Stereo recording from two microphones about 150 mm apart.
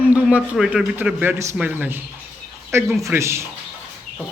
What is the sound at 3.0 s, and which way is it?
Speech, 20° right (ahead or behind).